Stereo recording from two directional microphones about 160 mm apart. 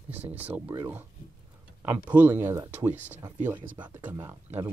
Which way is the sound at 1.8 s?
10° right (ahead or behind).